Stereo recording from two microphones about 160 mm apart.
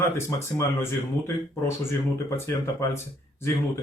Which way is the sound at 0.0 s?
15° left (ahead or behind).